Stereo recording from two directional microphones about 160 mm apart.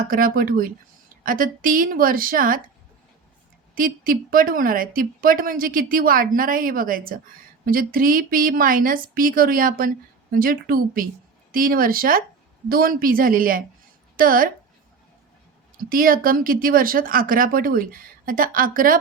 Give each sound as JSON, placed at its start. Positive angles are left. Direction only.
{"t": 0.1, "sound": "speech", "side_deg": -60}
{"t": 3.8, "sound": "speech", "side_deg": -60}
{"t": 15.9, "sound": "speech", "side_deg": -60}